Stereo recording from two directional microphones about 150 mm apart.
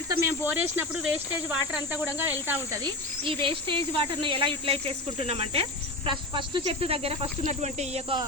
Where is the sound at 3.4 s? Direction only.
35° right (ahead or behind).